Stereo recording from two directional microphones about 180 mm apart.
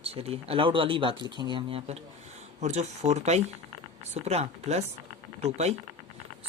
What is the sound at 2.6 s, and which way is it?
Speech, 40° right (ahead or behind).